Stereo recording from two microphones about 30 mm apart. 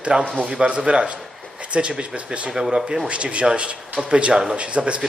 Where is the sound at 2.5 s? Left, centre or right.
Centre.